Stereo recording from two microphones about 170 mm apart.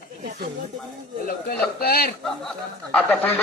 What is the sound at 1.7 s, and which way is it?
Speech, 65° left (ahead or behind).